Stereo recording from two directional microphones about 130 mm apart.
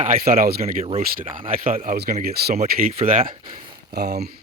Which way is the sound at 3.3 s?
35° right (ahead or behind).